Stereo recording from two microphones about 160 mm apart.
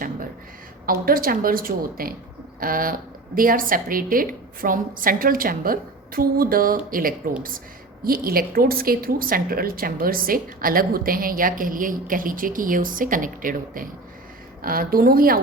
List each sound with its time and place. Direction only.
1.0 s a woman's voice: 65° right (ahead or behind)